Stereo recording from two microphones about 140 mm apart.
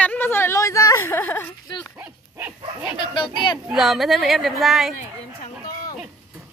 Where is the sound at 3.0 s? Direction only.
35° left (ahead or behind).